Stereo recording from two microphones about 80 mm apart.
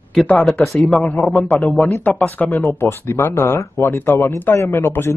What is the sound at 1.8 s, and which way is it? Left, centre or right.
Speech, left.